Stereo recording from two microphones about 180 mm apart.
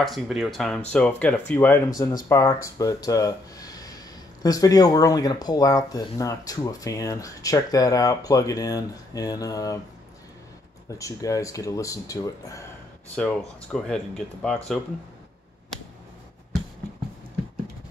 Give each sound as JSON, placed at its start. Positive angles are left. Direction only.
{"t": 0.0, "sound": "speech", "side_deg": 0}
{"t": 1.9, "sound": "speech", "side_deg": 20}
{"t": 11.0, "sound": "speech", "side_deg": 20}
{"t": 13.1, "sound": "speech", "side_deg": 5}